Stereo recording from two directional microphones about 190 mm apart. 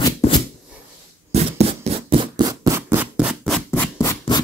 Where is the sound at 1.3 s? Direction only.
30° right (ahead or behind).